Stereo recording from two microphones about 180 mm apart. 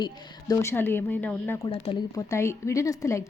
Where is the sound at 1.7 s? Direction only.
25° left (ahead or behind).